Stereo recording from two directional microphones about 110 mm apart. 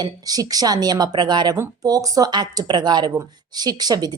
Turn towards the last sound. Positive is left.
turn(degrees=-35)  # may be behind; listen again after turning